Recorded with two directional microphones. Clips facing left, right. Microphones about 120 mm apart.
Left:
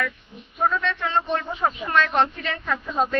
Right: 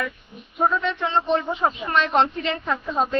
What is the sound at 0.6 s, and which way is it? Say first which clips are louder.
A man's voice: right 2 dB; 20° right (ahead or behind).